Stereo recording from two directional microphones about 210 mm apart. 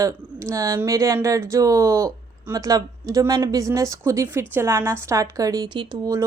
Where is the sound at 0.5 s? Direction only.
15° right (ahead or behind).